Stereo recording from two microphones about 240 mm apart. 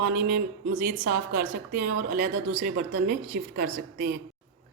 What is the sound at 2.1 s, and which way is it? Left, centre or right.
Speech, right.